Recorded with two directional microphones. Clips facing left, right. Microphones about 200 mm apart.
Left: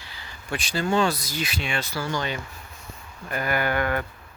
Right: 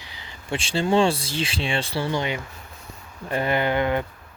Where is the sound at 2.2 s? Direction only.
20° right (ahead or behind).